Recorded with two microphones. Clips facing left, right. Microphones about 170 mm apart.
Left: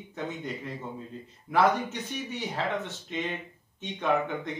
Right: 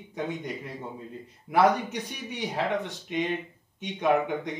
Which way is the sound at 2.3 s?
15° right (ahead or behind).